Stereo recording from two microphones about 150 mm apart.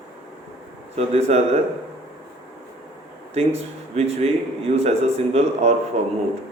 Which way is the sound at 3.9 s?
45° right (ahead or behind).